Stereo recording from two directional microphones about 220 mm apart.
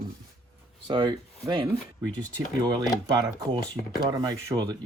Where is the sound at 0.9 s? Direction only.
20° right (ahead or behind).